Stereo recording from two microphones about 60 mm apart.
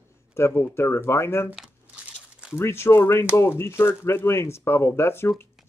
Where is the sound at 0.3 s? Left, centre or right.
Left.